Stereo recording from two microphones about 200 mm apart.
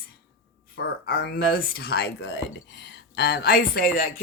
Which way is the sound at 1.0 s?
50° left (ahead or behind).